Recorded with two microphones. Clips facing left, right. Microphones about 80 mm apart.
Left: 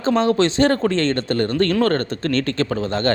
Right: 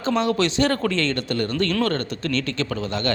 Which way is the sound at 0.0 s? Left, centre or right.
Left.